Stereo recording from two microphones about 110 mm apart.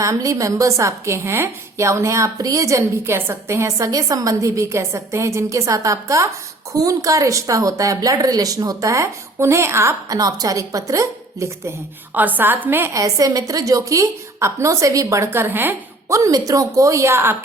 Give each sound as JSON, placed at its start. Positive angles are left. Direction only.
{"t": 0.0, "sound": "a woman's voice", "side_deg": -30}
{"t": 12.1, "sound": "a woman's voice", "side_deg": -15}